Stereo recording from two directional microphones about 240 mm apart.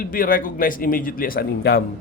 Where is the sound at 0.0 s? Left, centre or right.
Left.